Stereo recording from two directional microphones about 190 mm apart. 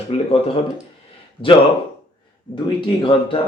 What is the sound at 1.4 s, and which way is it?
Speech, 25° left (ahead or behind).